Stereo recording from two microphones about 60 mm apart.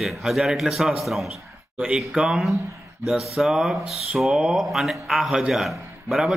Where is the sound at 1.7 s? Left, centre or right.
Centre.